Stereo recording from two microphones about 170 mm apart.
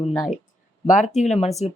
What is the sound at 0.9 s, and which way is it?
Speech, 45° left (ahead or behind).